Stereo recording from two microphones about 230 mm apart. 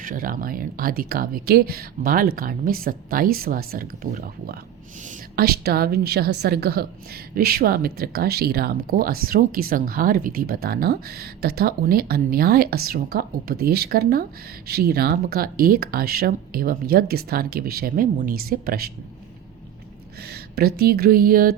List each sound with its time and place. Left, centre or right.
0.0 s a woman's voice: right
20.3 s speech: right